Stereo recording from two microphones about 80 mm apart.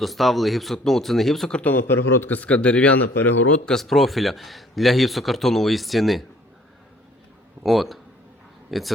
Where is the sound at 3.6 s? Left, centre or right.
Centre.